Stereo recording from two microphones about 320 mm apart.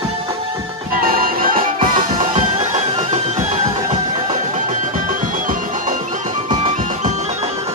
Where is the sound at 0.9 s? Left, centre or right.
Right.